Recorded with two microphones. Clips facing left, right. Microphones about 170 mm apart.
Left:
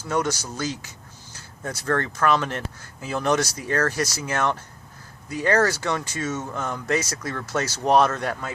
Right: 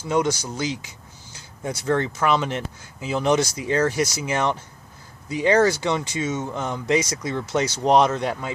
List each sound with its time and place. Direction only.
0.1 s speech: 10° right (ahead or behind)